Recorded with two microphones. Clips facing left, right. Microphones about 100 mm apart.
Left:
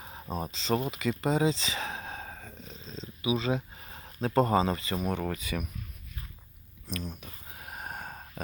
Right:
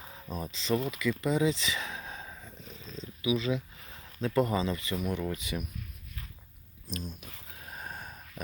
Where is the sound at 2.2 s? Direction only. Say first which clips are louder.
Left 2 dB; 60° left (ahead or behind).